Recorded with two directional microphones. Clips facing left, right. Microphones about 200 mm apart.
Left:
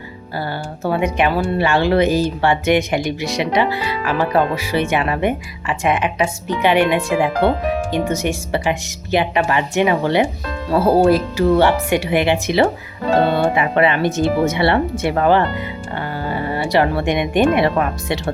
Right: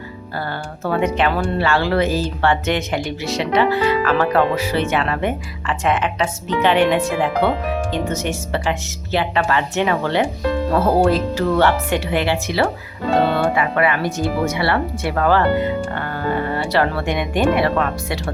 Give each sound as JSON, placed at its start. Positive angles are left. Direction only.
{"t": 0.9, "sound": "speech", "side_deg": 10}